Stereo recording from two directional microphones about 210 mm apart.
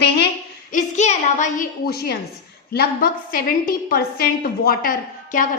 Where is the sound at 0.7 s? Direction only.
35° left (ahead or behind).